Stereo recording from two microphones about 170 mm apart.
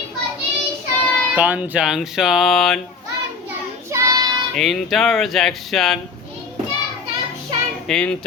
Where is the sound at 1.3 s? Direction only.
10° right (ahead or behind).